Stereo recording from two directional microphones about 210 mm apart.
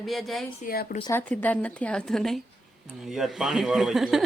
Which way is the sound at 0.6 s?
45° left (ahead or behind).